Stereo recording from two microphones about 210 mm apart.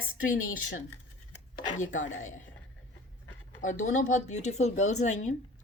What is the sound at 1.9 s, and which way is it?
Speech, 35° left (ahead or behind).